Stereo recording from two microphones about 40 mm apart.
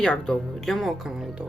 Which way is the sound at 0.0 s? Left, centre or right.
Left.